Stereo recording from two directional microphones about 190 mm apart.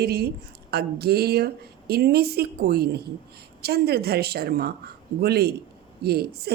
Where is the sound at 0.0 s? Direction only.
60° right (ahead or behind).